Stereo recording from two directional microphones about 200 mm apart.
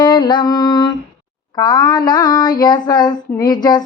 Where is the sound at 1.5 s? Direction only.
20° left (ahead or behind).